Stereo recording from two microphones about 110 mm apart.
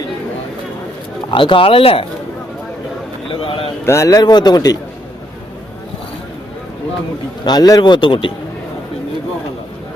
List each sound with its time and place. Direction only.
1.3 s speech: 50° left (ahead or behind)
3.4 s a sound: 55° left (ahead or behind)
3.8 s speech: 25° left (ahead or behind)
7.4 s a man's voice: 35° left (ahead or behind)